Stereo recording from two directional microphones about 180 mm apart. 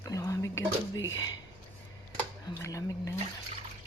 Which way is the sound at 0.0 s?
20° left (ahead or behind).